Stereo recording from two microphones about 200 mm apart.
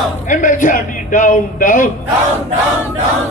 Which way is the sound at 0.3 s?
40° left (ahead or behind).